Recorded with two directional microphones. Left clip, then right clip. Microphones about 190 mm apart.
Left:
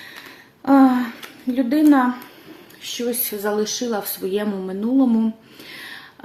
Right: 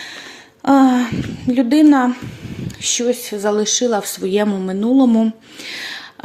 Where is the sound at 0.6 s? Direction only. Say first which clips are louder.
Right 2 dB; 45° right (ahead or behind).